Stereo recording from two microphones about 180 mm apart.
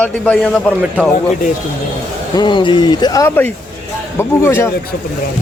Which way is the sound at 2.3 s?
25° left (ahead or behind).